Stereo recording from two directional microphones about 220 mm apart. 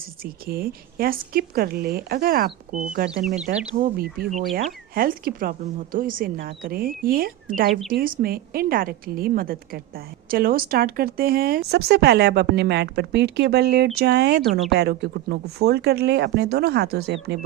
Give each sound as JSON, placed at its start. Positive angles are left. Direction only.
{"t": 0.4, "sound": "speech", "side_deg": -40}